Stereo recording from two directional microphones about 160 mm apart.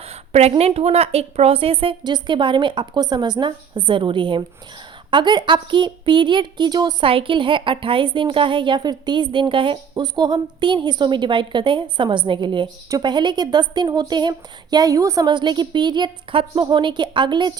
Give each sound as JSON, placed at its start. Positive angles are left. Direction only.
{"t": 0.0, "sound": "a woman's voice", "side_deg": -40}